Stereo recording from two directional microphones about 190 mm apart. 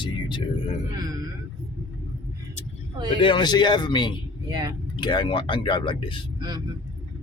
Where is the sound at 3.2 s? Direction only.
25° left (ahead or behind).